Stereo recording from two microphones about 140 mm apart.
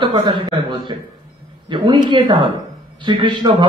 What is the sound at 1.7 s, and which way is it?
A man's voice, 35° right (ahead or behind).